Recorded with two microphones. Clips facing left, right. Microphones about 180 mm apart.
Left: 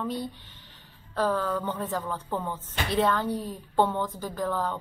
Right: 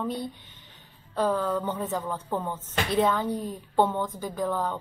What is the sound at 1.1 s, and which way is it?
A woman's voice, 10° right (ahead or behind).